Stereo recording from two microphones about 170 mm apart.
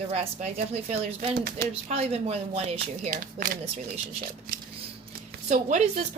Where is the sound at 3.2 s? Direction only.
55° right (ahead or behind).